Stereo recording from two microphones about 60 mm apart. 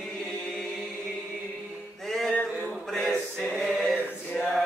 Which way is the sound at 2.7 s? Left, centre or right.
Centre.